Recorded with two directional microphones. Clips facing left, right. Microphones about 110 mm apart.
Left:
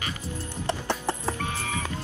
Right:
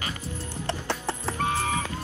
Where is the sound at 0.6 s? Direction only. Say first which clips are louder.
Left 2 dB; 15° left (ahead or behind).